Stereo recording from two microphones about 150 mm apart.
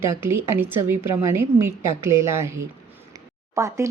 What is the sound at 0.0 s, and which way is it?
Speech, 15° right (ahead or behind).